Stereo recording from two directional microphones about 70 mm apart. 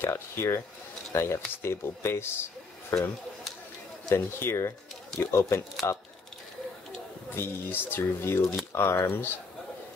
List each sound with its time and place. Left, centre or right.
0.0 s speech: left
4.1 s speech: left
7.2 s speech: left